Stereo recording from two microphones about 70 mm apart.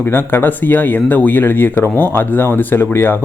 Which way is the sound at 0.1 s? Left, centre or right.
Left.